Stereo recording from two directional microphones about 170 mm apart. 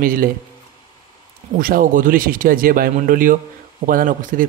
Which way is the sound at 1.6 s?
55° right (ahead or behind).